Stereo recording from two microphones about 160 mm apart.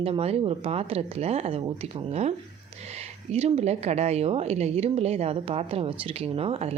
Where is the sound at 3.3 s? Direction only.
40° right (ahead or behind).